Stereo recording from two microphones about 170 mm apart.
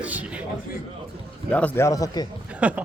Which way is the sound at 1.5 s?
10° left (ahead or behind).